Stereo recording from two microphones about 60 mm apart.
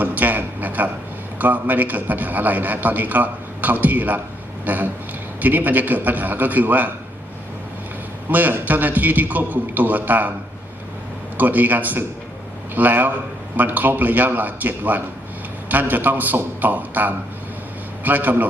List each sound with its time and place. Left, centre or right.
0.0 s a sound: right
1.4 s a man's voice: right
8.3 s a man's voice: right
11.3 s a man's voice: right